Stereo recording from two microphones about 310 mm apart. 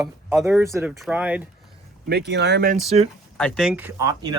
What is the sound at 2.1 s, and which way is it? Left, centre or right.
Speech, right.